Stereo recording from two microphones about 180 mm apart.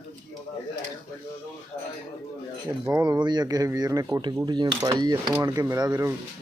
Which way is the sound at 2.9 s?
20° right (ahead or behind).